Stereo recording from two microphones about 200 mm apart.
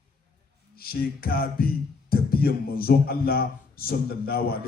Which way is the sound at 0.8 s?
50° left (ahead or behind).